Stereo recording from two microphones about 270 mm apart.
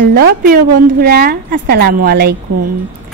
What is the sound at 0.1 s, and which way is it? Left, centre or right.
A woman's voice, right.